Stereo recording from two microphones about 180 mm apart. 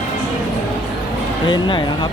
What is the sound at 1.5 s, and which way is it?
Speech, 25° left (ahead or behind).